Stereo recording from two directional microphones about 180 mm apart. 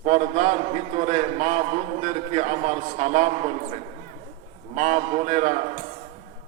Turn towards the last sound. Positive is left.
turn(degrees=-40)  # may be behind; listen again after turning